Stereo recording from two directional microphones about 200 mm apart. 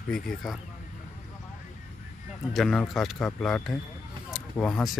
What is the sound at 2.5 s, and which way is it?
Speech, centre (ahead or behind).